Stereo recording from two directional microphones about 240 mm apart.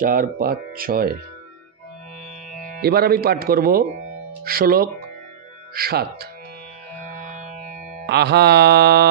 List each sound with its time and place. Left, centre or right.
0.0 s speech: right
2.8 s speech: right
8.1 s mantra: right